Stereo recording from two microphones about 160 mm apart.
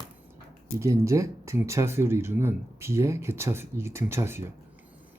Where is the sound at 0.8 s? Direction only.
20° right (ahead or behind).